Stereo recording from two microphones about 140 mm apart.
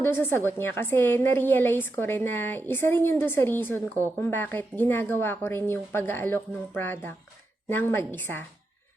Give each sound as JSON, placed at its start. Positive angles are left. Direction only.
{"t": 0.0, "sound": "a woman's voice", "side_deg": 15}